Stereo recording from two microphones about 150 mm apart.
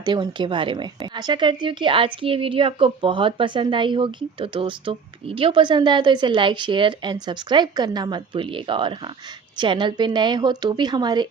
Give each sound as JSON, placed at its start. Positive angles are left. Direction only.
{"t": 0.0, "sound": "speech", "side_deg": -30}